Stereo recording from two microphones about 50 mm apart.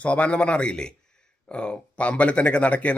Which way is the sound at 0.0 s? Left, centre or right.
Left.